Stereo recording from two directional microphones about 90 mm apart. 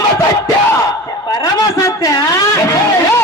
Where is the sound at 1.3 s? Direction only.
45° left (ahead or behind).